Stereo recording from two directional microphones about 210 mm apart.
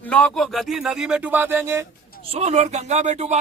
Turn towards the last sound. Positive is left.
turn(degrees=-35)  # may be behind; listen again after turning